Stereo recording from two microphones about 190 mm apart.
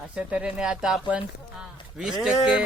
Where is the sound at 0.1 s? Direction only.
5° right (ahead or behind).